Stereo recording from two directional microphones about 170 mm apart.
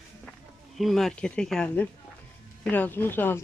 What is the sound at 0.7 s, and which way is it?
Speech, centre (ahead or behind).